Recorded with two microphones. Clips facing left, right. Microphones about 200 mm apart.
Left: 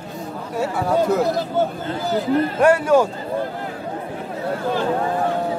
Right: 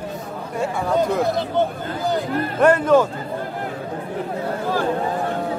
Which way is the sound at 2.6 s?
10° left (ahead or behind).